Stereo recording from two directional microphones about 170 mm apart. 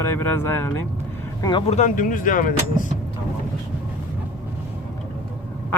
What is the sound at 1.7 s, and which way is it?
Speech, 45° left (ahead or behind).